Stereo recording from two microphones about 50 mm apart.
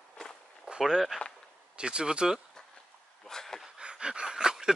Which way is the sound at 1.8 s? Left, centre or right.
Centre.